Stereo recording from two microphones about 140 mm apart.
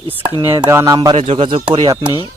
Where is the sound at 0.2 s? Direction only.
35° right (ahead or behind).